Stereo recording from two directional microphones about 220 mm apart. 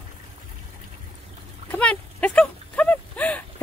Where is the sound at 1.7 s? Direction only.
5° left (ahead or behind).